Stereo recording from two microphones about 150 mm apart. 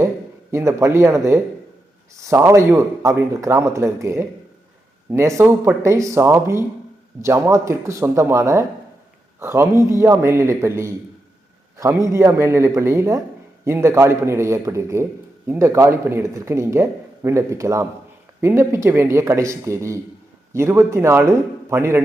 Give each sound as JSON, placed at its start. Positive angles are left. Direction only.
{"t": 0.5, "sound": "speech", "side_deg": -20}